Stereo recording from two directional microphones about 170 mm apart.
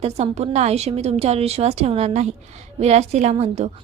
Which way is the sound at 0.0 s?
35° right (ahead or behind).